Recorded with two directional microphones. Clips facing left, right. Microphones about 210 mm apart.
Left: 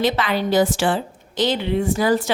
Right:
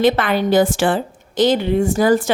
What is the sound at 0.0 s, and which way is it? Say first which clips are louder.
A woman's voice: right 5 dB; 55° right (ahead or behind).